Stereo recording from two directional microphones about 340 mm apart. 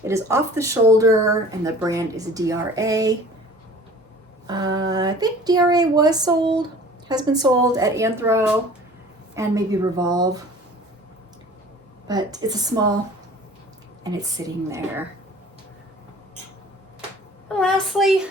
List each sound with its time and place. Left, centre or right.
0.0 s speech: centre
4.4 s speech: centre
12.0 s speech: centre
14.0 s speech: centre
17.5 s a sound: centre